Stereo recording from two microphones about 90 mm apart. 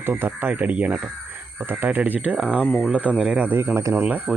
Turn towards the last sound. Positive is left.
turn(degrees=-15)  # may be behind; listen again after turning